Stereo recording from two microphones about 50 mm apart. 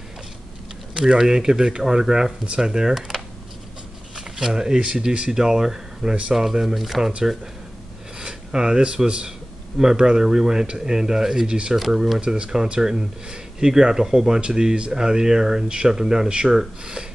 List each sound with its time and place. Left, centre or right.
0.9 s speech: centre
4.4 s speech: centre
8.2 s speech: centre
11.7 s speech: centre